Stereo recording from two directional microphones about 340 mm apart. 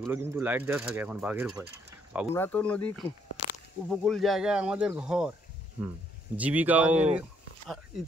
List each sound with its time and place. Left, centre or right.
0.0 s speech: centre
2.3 s speech: centre
3.4 s a sound: centre
3.9 s speech: centre
6.3 s speech: centre